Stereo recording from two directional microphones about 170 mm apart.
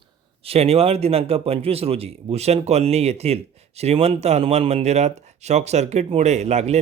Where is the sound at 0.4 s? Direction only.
35° right (ahead or behind).